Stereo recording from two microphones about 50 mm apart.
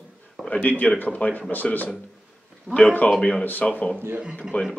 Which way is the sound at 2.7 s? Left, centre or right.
Right.